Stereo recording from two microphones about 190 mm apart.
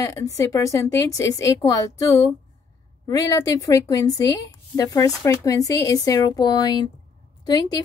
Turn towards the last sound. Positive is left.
turn(degrees=20)  # may be behind; listen again after turning